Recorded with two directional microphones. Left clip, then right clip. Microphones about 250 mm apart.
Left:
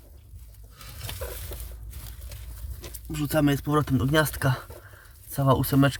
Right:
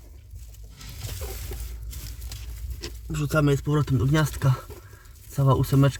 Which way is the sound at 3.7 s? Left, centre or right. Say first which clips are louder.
Left 2 dB; left.